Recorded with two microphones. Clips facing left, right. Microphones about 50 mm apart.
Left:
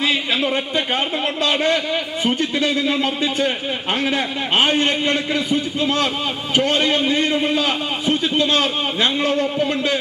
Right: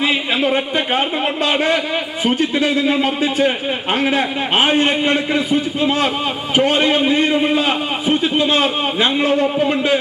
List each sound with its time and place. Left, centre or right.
0.0 s a man's voice: centre